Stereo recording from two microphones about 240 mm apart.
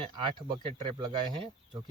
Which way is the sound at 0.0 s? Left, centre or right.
Right.